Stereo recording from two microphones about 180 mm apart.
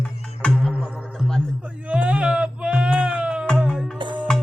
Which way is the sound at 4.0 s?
25° right (ahead or behind).